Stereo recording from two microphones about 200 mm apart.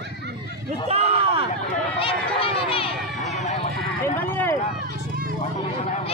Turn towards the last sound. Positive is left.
turn(degrees=10)  # may be behind; listen again after turning